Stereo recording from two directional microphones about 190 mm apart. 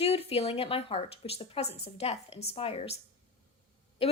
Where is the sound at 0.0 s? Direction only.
30° left (ahead or behind).